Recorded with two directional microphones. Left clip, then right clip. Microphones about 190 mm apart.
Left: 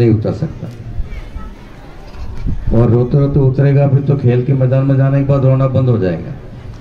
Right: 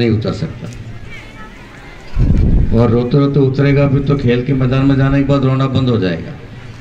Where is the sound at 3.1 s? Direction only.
50° left (ahead or behind).